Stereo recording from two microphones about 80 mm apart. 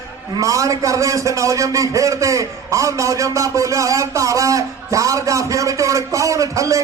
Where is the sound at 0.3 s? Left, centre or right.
Right.